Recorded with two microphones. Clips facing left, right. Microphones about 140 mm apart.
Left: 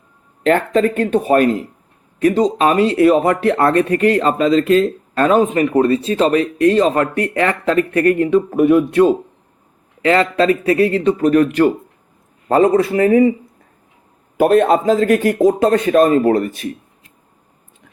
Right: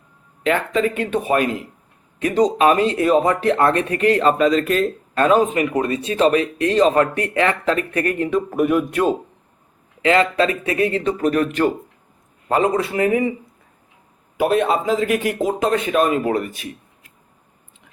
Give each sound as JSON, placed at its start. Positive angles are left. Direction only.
{"t": 0.4, "sound": "speech", "side_deg": 45}
{"t": 14.3, "sound": "speech", "side_deg": 45}